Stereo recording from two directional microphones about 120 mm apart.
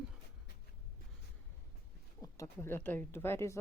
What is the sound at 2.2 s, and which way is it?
Speech, 25° left (ahead or behind).